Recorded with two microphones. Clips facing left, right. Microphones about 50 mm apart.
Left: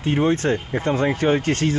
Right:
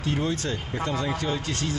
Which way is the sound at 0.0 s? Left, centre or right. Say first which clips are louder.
Left 8 dB; left.